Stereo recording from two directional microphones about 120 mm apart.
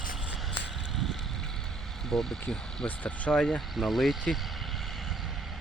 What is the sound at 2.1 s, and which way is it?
Speech, 5° left (ahead or behind).